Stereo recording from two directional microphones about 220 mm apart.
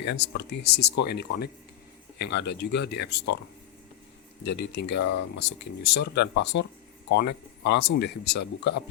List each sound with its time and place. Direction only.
0.0 s speech: 50° left (ahead or behind)
4.4 s speech: 50° left (ahead or behind)